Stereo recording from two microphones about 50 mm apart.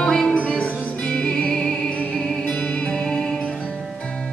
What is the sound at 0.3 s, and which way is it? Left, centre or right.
Music, left.